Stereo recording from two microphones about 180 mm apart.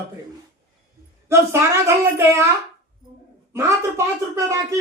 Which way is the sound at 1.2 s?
15° right (ahead or behind).